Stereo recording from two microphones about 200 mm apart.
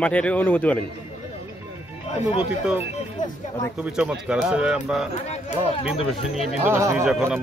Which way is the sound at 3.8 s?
5° right (ahead or behind).